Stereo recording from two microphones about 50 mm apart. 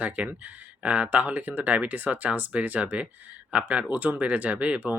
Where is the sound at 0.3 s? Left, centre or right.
Right.